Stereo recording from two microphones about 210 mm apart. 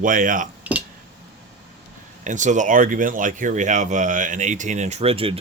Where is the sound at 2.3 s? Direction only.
35° right (ahead or behind).